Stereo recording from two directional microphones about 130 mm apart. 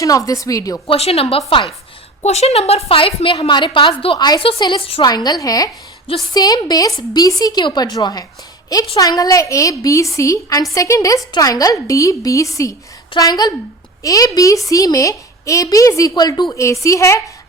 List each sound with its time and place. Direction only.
0.0 s a woman's voice: 25° left (ahead or behind)
0.9 s a woman's voice: 50° left (ahead or behind)
5.0 s a woman's voice: 30° left (ahead or behind)